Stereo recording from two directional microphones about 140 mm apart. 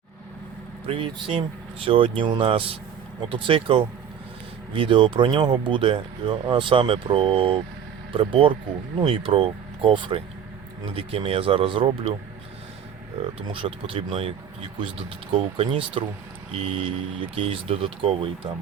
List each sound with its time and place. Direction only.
0.9 s speech: 40° right (ahead or behind)
13.5 s speech: 40° right (ahead or behind)